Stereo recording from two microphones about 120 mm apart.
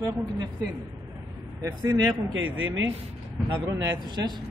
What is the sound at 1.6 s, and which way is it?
Speech, 30° right (ahead or behind).